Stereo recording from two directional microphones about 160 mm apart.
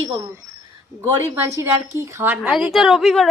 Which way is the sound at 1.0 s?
20° right (ahead or behind).